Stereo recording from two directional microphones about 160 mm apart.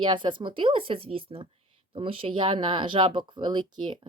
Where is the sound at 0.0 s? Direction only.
30° right (ahead or behind).